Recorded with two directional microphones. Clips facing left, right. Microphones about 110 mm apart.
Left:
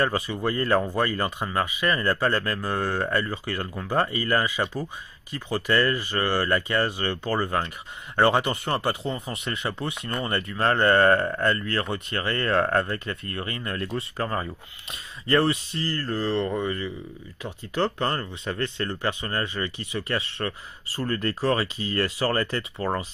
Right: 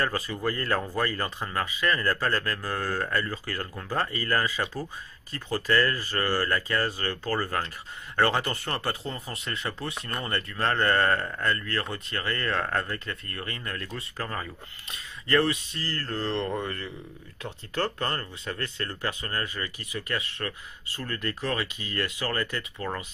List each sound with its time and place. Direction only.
0.0 s speech: 20° left (ahead or behind)